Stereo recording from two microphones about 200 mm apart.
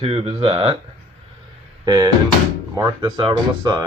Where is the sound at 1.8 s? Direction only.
20° right (ahead or behind).